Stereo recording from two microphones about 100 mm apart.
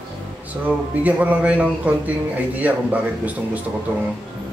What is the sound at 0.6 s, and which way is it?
Speech, 15° right (ahead or behind).